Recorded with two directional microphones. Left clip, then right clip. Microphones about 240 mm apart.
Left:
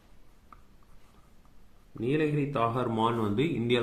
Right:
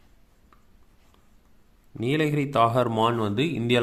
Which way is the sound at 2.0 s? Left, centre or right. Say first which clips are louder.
Right 3 dB; right.